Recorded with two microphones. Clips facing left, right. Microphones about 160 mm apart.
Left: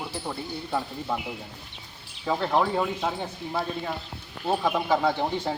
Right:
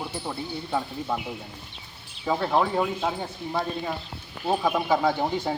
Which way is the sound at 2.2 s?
5° right (ahead or behind).